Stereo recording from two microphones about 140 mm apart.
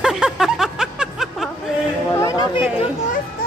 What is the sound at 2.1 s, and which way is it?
Speech, 25° left (ahead or behind).